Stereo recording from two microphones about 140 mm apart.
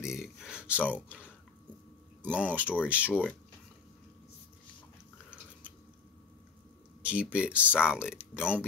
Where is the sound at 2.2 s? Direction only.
10° right (ahead or behind).